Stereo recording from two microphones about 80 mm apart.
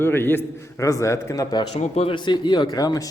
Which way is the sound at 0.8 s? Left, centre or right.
Left.